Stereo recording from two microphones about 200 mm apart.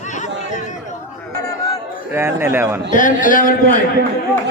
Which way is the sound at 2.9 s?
40° left (ahead or behind).